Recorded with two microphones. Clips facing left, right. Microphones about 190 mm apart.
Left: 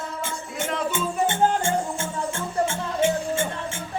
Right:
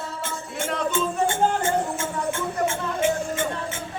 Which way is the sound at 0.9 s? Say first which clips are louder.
Right 1 dB; 25° left (ahead or behind).